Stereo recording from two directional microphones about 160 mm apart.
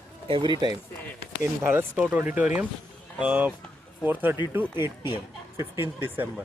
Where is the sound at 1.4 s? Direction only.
15° right (ahead or behind).